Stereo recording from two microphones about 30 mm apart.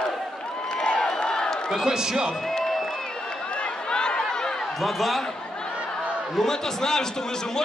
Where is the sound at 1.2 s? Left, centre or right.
Left.